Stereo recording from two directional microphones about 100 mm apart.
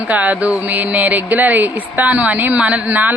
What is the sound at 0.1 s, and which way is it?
A woman's voice, 15° right (ahead or behind).